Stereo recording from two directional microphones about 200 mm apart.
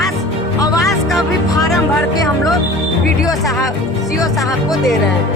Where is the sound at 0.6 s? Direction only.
15° left (ahead or behind).